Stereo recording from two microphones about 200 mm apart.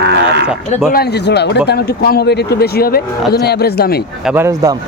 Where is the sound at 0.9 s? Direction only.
50° left (ahead or behind).